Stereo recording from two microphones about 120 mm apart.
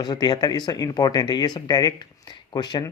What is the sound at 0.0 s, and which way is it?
Speech, 35° left (ahead or behind).